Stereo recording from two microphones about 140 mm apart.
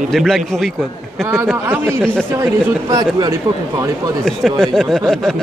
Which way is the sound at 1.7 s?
15° right (ahead or behind).